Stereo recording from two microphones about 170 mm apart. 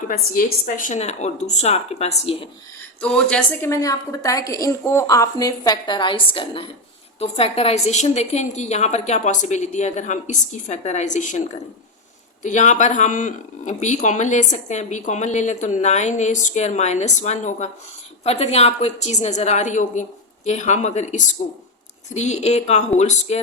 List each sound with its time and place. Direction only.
0.1 s a woman's voice: 55° left (ahead or behind); by 2.5 s 35° left (ahead or behind)
3.0 s speech: 5° left (ahead or behind)
3.7 s a woman's voice: 20° left (ahead or behind); by 23.4 s 40° left (ahead or behind)